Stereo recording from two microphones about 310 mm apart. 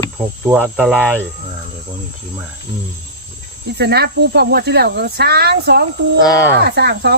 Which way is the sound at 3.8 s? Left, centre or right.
Right.